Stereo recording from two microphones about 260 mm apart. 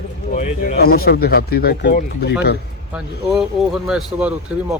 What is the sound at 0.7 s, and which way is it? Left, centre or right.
Speech, left.